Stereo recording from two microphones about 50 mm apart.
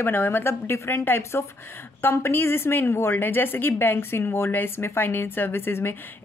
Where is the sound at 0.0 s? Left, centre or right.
Left.